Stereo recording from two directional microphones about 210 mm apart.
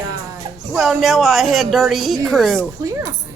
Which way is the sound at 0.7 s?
Centre (ahead or behind).